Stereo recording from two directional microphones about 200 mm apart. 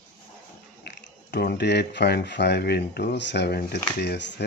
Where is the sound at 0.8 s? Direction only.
55° left (ahead or behind).